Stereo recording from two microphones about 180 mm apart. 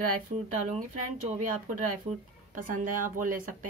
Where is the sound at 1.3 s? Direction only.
45° right (ahead or behind).